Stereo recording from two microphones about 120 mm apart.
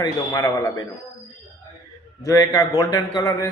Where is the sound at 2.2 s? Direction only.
30° left (ahead or behind).